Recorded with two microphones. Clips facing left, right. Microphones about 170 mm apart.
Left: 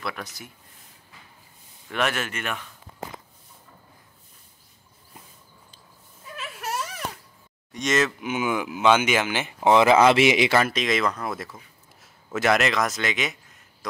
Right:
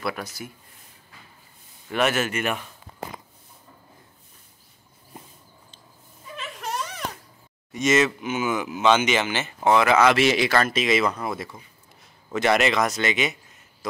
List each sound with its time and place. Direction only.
0.0 s speech: 5° right (ahead or behind)
1.9 s speech: 5° right (ahead or behind)
6.3 s a sound: 5° left (ahead or behind)
7.7 s speech: 5° right (ahead or behind)
8.2 s speech: 10° left (ahead or behind)
9.8 s speech: 25° left (ahead or behind)
10.2 s speech: 15° left (ahead or behind)
10.7 s speech: 5° right (ahead or behind)